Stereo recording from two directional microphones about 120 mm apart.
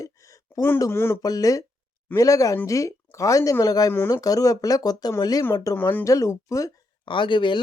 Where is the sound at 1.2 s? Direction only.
30° left (ahead or behind).